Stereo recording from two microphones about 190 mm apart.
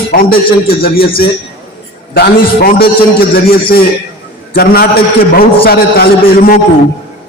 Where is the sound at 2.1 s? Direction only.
55° left (ahead or behind).